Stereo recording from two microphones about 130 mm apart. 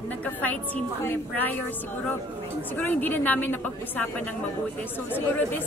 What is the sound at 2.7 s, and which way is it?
A woman's voice, 15° left (ahead or behind).